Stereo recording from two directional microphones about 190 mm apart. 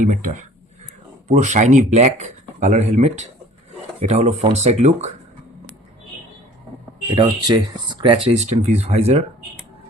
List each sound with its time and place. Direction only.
0.0 s speech: 45° right (ahead or behind)
1.3 s speech: 40° right (ahead or behind)
7.2 s speech: 20° right (ahead or behind)